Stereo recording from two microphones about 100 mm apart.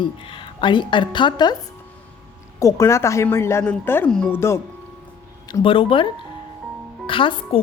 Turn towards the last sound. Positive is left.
turn(degrees=60)  # may be behind; listen again after turning